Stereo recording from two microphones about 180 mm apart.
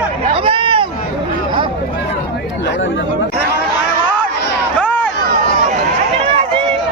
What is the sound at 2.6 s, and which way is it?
Speech, 90° left.